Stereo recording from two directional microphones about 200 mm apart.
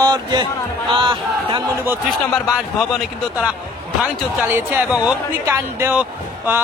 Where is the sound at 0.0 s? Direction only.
20° right (ahead or behind).